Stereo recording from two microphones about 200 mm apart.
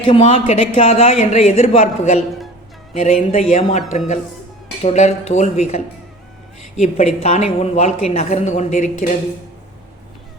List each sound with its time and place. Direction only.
0.0 s speech: 30° left (ahead or behind)